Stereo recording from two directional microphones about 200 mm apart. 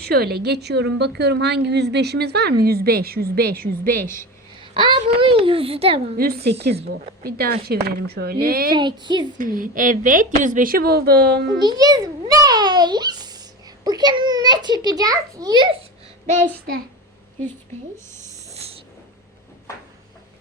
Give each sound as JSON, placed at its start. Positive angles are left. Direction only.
{"t": 0.0, "sound": "a woman's voice", "side_deg": -50}
{"t": 4.6, "sound": "a child's voice", "side_deg": -25}
{"t": 6.1, "sound": "a woman's voice", "side_deg": -50}
{"t": 8.7, "sound": "a child's voice", "side_deg": -25}
{"t": 9.4, "sound": "a woman's voice", "side_deg": -45}
{"t": 11.6, "sound": "a sound", "side_deg": -20}
{"t": 13.8, "sound": "a child's voice", "side_deg": -20}
{"t": 18.5, "sound": "a sound", "side_deg": -30}